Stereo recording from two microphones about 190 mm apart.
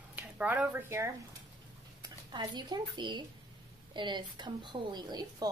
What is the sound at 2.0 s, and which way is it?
A woman's voice, 20° right (ahead or behind).